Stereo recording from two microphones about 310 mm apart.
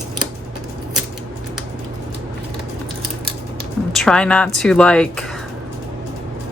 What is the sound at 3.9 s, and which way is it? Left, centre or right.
Speech, centre.